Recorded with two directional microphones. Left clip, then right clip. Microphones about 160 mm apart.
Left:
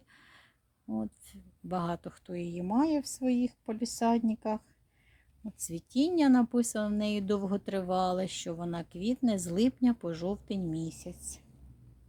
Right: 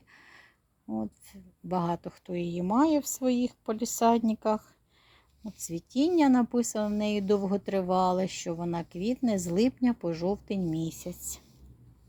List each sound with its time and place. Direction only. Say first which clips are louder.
0.1 s speech: right 5 dB; 10° right (ahead or behind)
3.2 s speech: right 2 dB; 15° left (ahead or behind)
3.9 s speech: right 5 dB; 25° right (ahead or behind)
5.4 s speech: right 3 dB; 5° right (ahead or behind)